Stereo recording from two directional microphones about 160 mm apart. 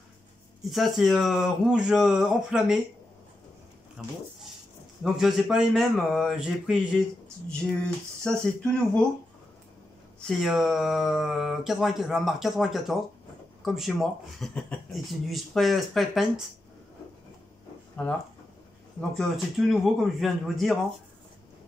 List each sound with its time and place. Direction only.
0.7 s speech: centre (ahead or behind)
4.0 s speech: 5° right (ahead or behind)
10.2 s speech: centre (ahead or behind)
18.0 s speech: 10° left (ahead or behind)